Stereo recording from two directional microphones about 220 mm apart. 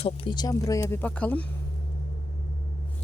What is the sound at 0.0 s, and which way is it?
Speech, 25° left (ahead or behind).